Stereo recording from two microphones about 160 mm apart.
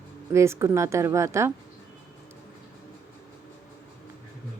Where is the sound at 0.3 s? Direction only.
15° right (ahead or behind).